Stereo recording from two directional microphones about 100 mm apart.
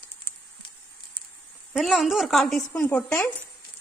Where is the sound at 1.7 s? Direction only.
Centre (ahead or behind).